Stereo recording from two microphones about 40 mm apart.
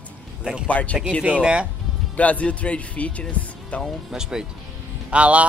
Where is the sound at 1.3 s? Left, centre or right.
Right.